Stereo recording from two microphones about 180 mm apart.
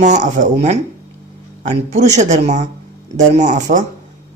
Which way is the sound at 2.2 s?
40° right (ahead or behind).